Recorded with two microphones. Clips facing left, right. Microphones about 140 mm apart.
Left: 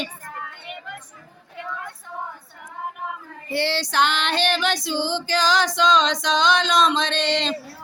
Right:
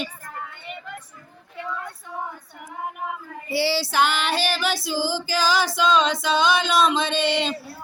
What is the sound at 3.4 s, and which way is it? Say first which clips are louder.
Female singing: right 1 dB; 10° right (ahead or behind).